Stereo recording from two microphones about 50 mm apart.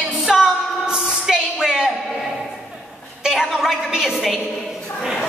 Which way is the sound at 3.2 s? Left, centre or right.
Centre.